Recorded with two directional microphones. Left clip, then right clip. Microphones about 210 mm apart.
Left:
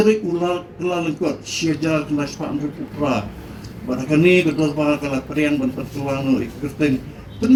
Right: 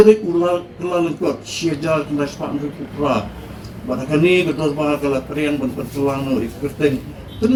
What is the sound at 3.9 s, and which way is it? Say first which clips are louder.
Speech: even; 35° left (ahead or behind).